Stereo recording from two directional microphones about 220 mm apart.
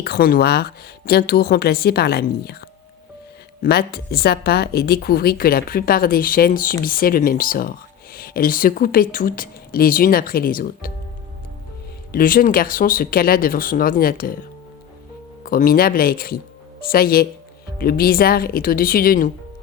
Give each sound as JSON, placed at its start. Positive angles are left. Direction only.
{"t": 0.0, "sound": "speech", "side_deg": 45}
{"t": 12.1, "sound": "speech", "side_deg": 40}
{"t": 15.4, "sound": "speech", "side_deg": 40}